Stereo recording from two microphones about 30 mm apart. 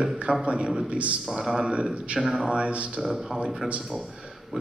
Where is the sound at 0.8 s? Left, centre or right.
Right.